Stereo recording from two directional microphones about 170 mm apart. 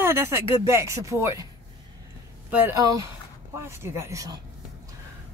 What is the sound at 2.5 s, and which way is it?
Speech, 10° right (ahead or behind).